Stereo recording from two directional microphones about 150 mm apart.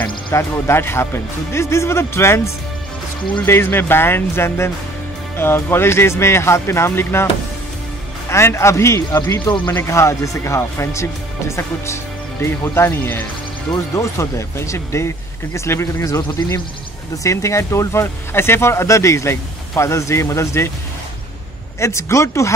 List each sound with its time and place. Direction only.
0.0 s speech: 20° left (ahead or behind)
8.3 s speech: 15° left (ahead or behind)
21.7 s speech: 20° left (ahead or behind)